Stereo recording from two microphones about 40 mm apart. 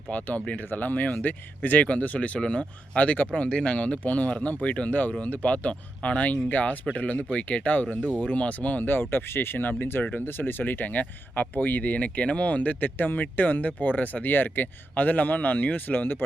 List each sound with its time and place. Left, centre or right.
0.1 s speech: left
4.1 s speech: left
8.8 s speech: left
10.0 s speech: left
10.2 s speech: left